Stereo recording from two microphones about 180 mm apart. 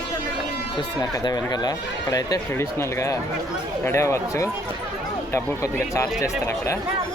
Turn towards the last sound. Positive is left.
turn(degrees=15)  # may be behind; listen again after turning